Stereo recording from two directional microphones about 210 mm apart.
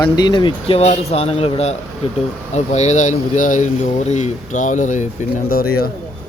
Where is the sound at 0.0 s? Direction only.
20° left (ahead or behind).